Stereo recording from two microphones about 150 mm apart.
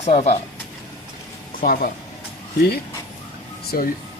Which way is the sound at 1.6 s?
65° left (ahead or behind).